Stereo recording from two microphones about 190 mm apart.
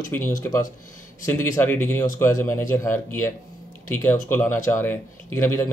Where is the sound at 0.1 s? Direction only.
15° left (ahead or behind).